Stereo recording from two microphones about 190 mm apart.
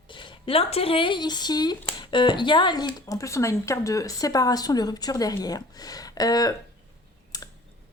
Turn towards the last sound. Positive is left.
turn(degrees=20)  # may be behind; listen again after turning